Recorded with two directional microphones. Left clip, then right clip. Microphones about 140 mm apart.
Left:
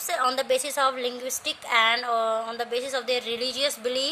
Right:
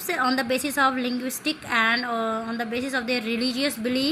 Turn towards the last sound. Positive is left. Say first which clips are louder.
# even
turn(degrees=35)  # may be behind; listen again after turning